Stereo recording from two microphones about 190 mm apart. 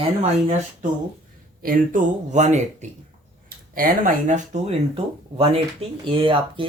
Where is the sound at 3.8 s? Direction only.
45° right (ahead or behind).